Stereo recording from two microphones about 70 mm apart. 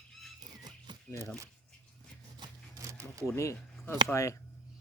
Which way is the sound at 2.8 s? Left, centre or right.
Right.